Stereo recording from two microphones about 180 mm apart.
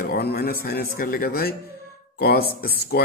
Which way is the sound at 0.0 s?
60° left (ahead or behind).